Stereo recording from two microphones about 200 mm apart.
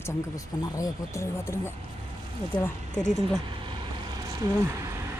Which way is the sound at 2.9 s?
35° left (ahead or behind).